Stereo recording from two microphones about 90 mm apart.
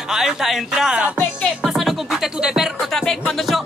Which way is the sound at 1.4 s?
Centre (ahead or behind).